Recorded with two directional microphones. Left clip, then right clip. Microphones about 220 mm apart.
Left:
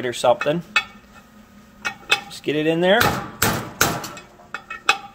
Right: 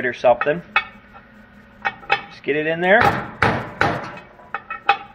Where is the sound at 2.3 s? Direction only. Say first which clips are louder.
Even; 60° left (ahead or behind).